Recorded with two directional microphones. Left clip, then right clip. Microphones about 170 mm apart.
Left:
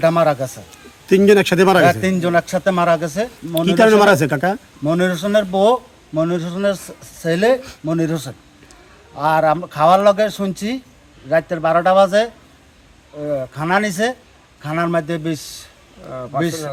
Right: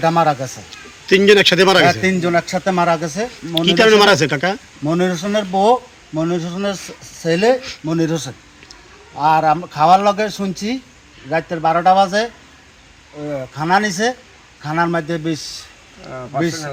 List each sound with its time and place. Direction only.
0.0 s speech: 35° left (ahead or behind)
1.0 s speech: 65° left (ahead or behind)
1.8 s speech: 35° left (ahead or behind)
3.8 s speech: 70° left (ahead or behind)
4.5 s speech: 35° left (ahead or behind)
13.6 s speech: 30° left (ahead or behind)